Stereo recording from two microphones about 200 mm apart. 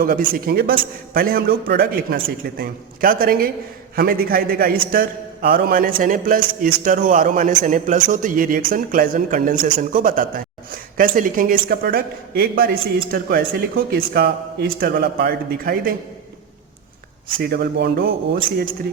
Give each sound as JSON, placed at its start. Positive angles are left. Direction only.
{"t": 0.0, "sound": "a man's voice", "side_deg": -45}
{"t": 17.4, "sound": "a man's voice", "side_deg": -50}